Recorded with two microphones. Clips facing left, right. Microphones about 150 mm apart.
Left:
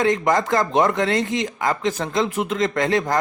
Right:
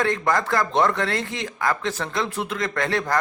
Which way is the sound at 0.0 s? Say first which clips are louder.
Left 3 dB; 20° left (ahead or behind).